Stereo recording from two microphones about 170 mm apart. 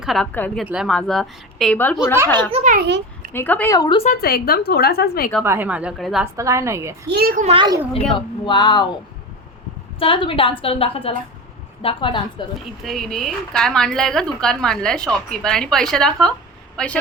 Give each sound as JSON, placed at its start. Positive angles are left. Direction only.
{"t": 0.0, "sound": "a woman's voice", "side_deg": 0}
{"t": 0.3, "sound": "a woman's voice", "side_deg": 10}
{"t": 0.6, "sound": "a woman's voice", "side_deg": -5}
{"t": 2.1, "sound": "a child's voice", "side_deg": -20}
{"t": 3.3, "sound": "a woman's voice", "side_deg": 10}
{"t": 3.8, "sound": "speech", "side_deg": 25}
{"t": 4.2, "sound": "a woman's voice", "side_deg": 60}
{"t": 5.4, "sound": "a woman's voice", "side_deg": -10}
{"t": 6.3, "sound": "a woman's voice", "side_deg": -15}
{"t": 7.1, "sound": "a child's voice", "side_deg": -65}
{"t": 7.4, "sound": "a child's voice", "side_deg": -30}
{"t": 8.1, "sound": "speech", "side_deg": 25}
{"t": 10.0, "sound": "a woman's voice", "side_deg": 30}
{"t": 12.8, "sound": "a woman's voice", "side_deg": 0}